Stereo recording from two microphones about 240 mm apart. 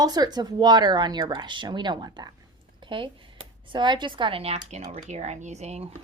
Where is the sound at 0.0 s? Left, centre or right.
Centre.